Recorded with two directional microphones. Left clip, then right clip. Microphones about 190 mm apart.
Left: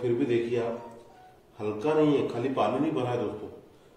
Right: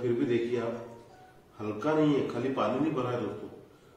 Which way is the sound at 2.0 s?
15° right (ahead or behind).